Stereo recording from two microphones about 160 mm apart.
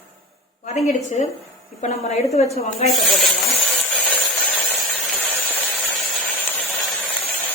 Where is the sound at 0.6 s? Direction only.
45° left (ahead or behind).